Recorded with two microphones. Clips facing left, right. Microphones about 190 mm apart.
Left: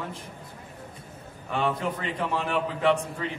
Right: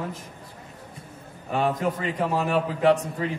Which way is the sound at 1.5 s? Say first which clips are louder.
Right 3 dB; 40° right (ahead or behind).